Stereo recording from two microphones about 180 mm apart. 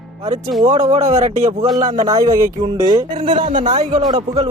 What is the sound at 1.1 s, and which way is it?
Speech, 40° right (ahead or behind).